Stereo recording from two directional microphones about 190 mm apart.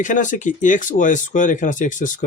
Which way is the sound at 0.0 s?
40° left (ahead or behind).